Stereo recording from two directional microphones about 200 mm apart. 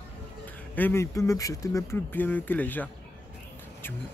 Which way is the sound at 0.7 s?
10° left (ahead or behind).